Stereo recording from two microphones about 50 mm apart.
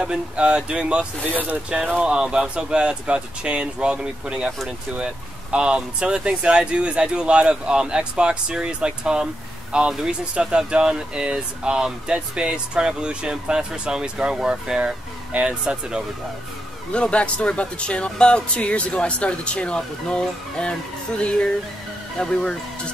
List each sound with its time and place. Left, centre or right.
0.0 s speech: centre
16.9 s speech: left